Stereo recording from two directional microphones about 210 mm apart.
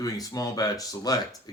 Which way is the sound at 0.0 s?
15° left (ahead or behind).